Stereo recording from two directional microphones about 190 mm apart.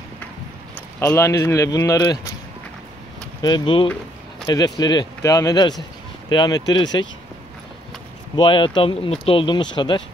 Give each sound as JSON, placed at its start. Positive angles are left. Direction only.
{"t": 0.7, "sound": "speech", "side_deg": 10}
{"t": 3.4, "sound": "speech", "side_deg": 25}
{"t": 8.4, "sound": "speech", "side_deg": 25}